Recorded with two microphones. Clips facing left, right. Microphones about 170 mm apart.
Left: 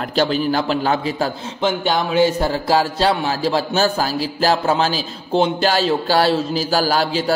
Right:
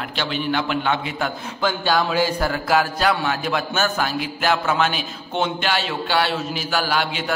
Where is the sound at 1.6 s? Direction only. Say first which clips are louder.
Left 2 dB; 20° left (ahead or behind).